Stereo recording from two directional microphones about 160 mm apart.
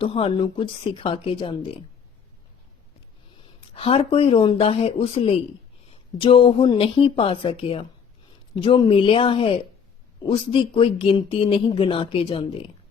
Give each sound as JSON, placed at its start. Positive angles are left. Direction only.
{"t": 0.0, "sound": "speech", "side_deg": 35}
{"t": 3.8, "sound": "speech", "side_deg": 35}